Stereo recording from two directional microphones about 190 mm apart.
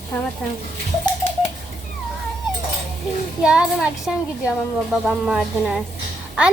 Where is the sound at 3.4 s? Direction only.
5° right (ahead or behind).